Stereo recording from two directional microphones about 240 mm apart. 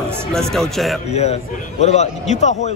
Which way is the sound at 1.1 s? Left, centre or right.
Left.